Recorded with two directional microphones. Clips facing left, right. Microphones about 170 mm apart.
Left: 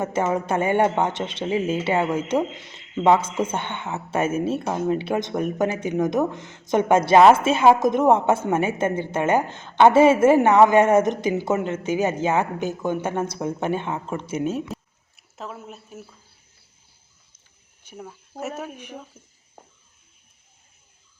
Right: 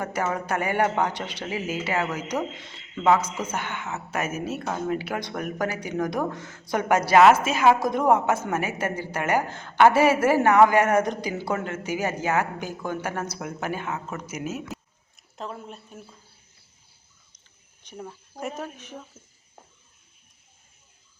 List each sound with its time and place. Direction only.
0.0 s speech: 25° left (ahead or behind)
14.7 s a sound: 5° left (ahead or behind)
17.8 s speech: 5° left (ahead or behind)